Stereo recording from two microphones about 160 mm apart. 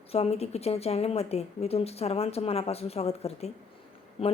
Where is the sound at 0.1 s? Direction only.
40° left (ahead or behind).